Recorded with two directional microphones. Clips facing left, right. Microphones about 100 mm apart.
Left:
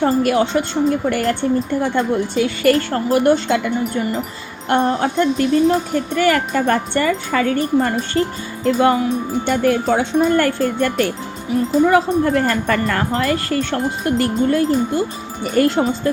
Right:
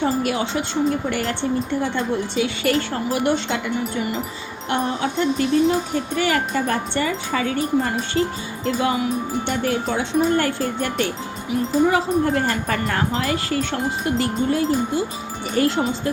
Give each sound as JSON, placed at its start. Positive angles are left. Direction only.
{"t": 0.0, "sound": "speech", "side_deg": 50}